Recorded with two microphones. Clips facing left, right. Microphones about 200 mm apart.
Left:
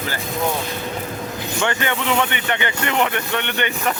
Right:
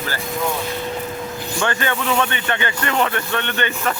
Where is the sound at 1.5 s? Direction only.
20° left (ahead or behind).